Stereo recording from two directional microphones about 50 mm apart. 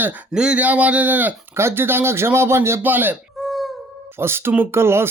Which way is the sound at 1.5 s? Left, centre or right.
Right.